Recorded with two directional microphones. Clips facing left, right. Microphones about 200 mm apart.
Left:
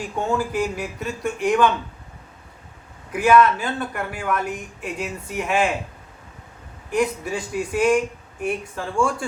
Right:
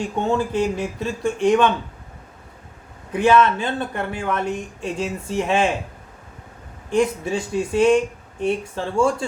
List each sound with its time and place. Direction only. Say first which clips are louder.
0.0 s speech: right 2 dB; 25° right (ahead or behind)
3.1 s speech: even; 25° right (ahead or behind)
6.9 s speech: right 3 dB; 25° right (ahead or behind)